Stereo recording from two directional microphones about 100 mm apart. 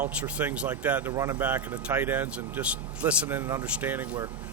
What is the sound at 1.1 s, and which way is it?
Speech, 30° right (ahead or behind).